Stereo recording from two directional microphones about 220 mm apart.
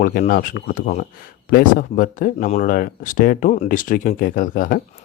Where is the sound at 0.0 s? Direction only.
40° left (ahead or behind).